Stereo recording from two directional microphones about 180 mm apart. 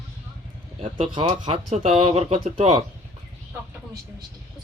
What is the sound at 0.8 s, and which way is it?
Speech, 30° right (ahead or behind).